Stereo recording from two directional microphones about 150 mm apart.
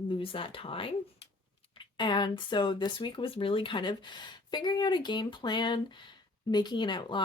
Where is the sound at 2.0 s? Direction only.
30° left (ahead or behind).